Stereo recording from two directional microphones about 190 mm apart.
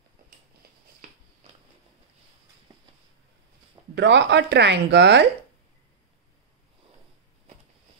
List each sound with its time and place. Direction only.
3.9 s speech: 65° right (ahead or behind)